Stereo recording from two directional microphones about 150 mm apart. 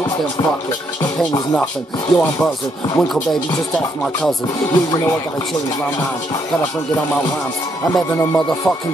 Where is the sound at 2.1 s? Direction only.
5° left (ahead or behind).